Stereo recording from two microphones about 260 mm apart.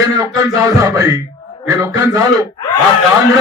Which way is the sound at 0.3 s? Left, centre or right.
Centre.